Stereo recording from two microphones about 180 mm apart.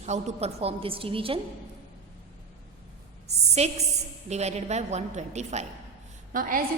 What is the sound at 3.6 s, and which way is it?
A woman's voice, 35° right (ahead or behind).